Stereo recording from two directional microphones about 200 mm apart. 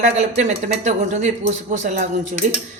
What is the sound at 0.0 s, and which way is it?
Speech, 35° right (ahead or behind).